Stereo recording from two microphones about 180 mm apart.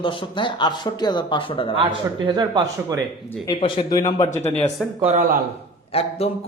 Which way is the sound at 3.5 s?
30° left (ahead or behind).